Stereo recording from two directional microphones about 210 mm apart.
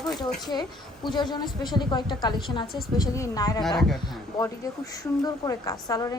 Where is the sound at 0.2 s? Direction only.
20° left (ahead or behind).